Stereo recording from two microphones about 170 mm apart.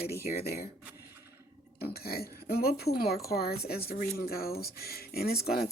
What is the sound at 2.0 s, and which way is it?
Speech, 65° left (ahead or behind).